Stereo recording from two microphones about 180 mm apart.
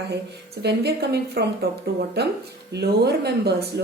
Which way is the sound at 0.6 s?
70° right (ahead or behind).